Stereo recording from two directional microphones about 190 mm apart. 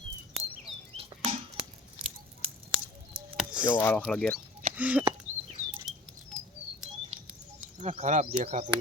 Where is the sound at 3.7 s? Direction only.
10° left (ahead or behind).